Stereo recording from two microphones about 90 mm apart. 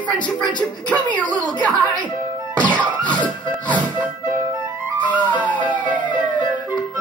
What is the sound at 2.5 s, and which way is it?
Music, 15° left (ahead or behind).